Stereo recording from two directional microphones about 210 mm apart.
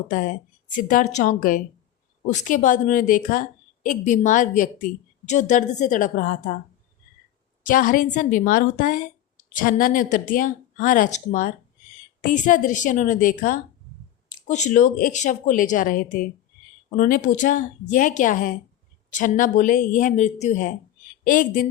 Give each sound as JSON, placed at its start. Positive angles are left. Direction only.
{"t": 0.1, "sound": "a woman's voice", "side_deg": 40}
{"t": 7.6, "sound": "a woman's voice", "side_deg": 40}